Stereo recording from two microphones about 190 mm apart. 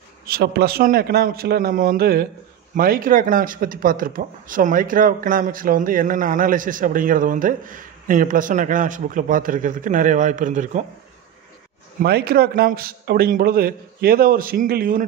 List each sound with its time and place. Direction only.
0.3 s speech: 55° right (ahead or behind)
12.0 s speech: 55° right (ahead or behind)